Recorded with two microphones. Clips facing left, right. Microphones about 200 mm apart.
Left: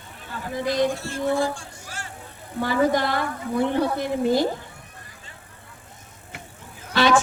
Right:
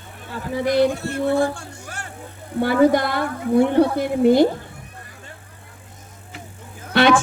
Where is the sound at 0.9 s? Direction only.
60° right (ahead or behind).